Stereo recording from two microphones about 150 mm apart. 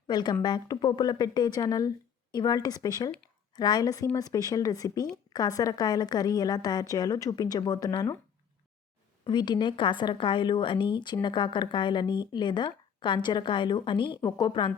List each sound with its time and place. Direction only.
0.1 s a woman's voice: 30° left (ahead or behind)
9.2 s a woman's voice: 30° left (ahead or behind)